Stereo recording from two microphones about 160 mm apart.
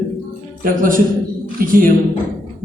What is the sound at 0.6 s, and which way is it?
Speech, 60° right (ahead or behind).